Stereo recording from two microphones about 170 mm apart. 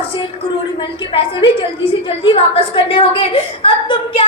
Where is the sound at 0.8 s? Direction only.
30° left (ahead or behind).